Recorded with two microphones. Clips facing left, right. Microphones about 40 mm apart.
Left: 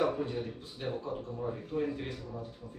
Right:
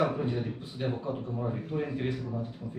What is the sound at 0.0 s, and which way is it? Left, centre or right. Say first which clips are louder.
A man's voice: right 2 dB; centre.